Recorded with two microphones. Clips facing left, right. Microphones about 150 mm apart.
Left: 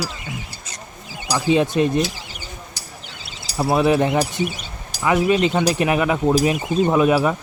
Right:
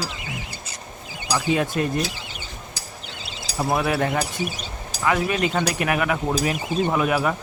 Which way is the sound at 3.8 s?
20° left (ahead or behind).